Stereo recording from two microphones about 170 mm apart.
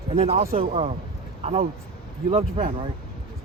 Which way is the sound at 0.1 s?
35° right (ahead or behind).